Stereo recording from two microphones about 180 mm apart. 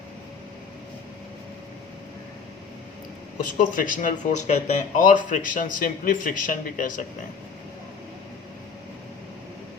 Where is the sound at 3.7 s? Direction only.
50° left (ahead or behind).